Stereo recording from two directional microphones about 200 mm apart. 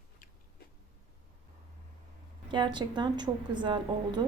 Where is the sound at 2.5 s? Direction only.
25° right (ahead or behind).